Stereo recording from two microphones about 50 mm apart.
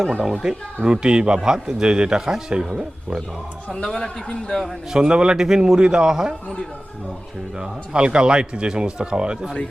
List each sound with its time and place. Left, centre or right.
0.1 s a man's voice: centre
3.7 s a man's voice: centre
4.9 s a man's voice: centre
7.6 s speech: centre